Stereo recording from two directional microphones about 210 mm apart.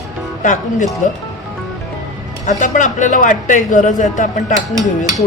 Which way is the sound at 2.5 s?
35° left (ahead or behind).